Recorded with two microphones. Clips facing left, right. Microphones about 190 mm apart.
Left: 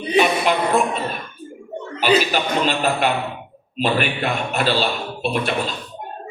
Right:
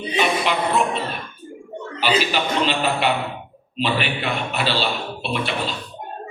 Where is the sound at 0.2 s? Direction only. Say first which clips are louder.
Left 3 dB; 45° left (ahead or behind).